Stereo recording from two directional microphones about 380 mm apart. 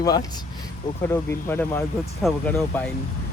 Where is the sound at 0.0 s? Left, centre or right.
Centre.